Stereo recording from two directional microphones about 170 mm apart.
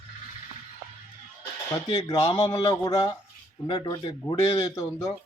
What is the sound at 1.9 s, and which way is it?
Speech, 25° left (ahead or behind).